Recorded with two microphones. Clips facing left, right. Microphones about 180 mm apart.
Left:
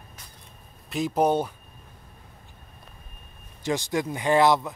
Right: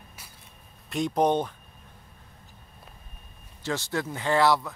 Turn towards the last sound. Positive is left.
turn(degrees=20)  # may be behind; listen again after turning